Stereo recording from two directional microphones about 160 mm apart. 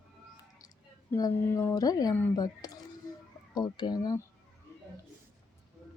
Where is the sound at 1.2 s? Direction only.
20° left (ahead or behind).